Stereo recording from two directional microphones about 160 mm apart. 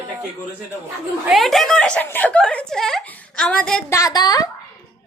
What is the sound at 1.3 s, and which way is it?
A woman's voice, centre (ahead or behind).